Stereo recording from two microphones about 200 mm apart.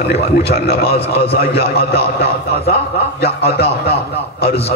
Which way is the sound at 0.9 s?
30° left (ahead or behind).